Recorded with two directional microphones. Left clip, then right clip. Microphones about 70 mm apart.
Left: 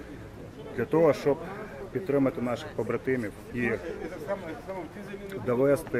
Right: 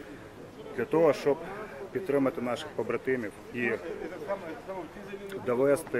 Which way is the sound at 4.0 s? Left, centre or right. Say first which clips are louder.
Left 1 dB; left.